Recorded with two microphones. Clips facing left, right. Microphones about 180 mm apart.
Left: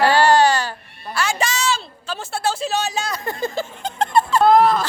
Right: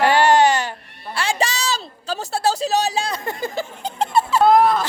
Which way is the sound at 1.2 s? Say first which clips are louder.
Even; 30° right (ahead or behind).